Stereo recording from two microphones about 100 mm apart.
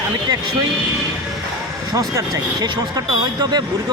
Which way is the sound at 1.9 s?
35° right (ahead or behind).